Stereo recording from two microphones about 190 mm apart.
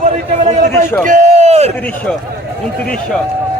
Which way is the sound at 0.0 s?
35° right (ahead or behind).